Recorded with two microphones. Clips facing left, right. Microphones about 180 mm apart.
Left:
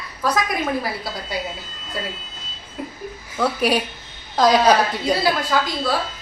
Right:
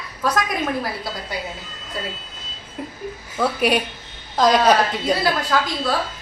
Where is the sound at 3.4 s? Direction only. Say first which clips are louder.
Even; centre (ahead or behind).